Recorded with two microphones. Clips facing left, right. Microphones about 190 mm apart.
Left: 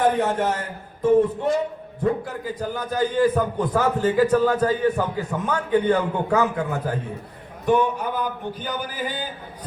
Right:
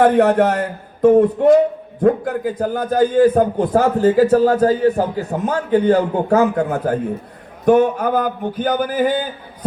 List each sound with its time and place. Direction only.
0.0 s a man's voice: 65° right (ahead or behind); by 9.2 s 50° right (ahead or behind)